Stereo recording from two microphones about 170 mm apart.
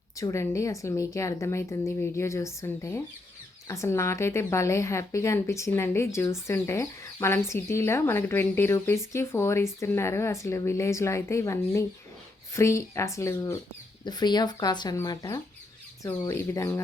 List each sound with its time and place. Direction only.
0.2 s a woman's voice: 15° left (ahead or behind)